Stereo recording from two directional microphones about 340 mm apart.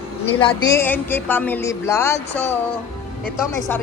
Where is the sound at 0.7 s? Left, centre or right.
Centre.